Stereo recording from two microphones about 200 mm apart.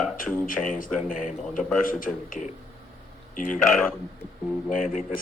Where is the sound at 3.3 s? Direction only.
40° left (ahead or behind).